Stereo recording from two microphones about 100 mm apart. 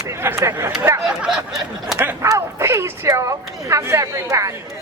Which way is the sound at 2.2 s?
30° right (ahead or behind).